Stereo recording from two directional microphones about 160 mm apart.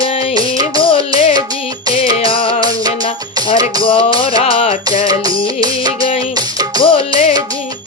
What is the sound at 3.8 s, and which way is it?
Music, 30° left (ahead or behind).